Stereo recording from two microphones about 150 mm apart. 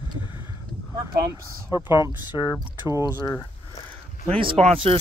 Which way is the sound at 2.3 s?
30° left (ahead or behind).